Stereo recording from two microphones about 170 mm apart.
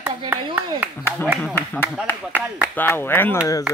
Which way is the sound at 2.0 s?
10° left (ahead or behind).